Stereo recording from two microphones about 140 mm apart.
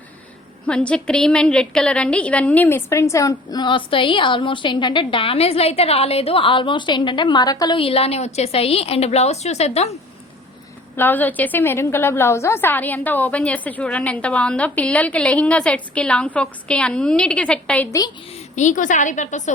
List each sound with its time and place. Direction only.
0.7 s a woman's voice: 5° left (ahead or behind); by 7.8 s 25° left (ahead or behind)
7.8 s a woman's voice: 45° left (ahead or behind)
10.9 s a woman's voice: 15° left (ahead or behind)
18.3 s a woman's voice: 60° left (ahead or behind)